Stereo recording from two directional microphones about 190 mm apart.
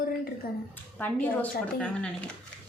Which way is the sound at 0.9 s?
10° left (ahead or behind).